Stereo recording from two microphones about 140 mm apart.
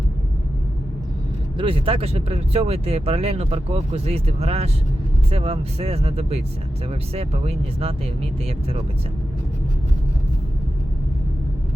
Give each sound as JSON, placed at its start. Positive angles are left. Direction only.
{"t": 1.5, "sound": "speech", "side_deg": -40}